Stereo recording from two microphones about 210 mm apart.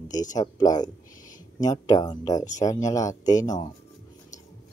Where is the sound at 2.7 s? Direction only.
15° left (ahead or behind).